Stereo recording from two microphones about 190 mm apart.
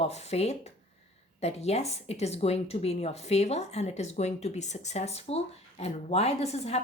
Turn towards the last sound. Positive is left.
turn(degrees=35)  # may be behind; listen again after turning